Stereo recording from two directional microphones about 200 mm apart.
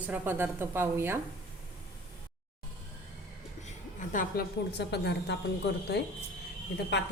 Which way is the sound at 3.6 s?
40° left (ahead or behind).